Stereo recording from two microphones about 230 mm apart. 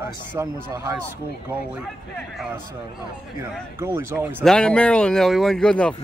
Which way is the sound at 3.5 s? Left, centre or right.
Centre.